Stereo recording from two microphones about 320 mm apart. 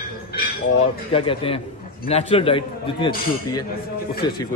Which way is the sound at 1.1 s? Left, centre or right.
Centre.